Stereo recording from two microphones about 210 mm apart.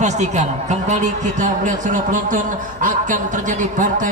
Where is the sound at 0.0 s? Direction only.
35° right (ahead or behind).